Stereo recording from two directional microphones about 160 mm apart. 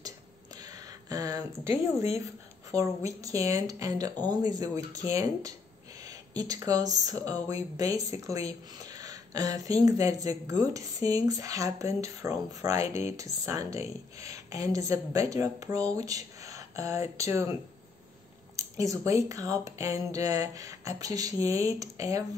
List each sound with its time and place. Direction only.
0.6 s a sound: 25° right (ahead or behind)
2.2 s speech: 20° right (ahead or behind)
18.6 s speech: 20° right (ahead or behind)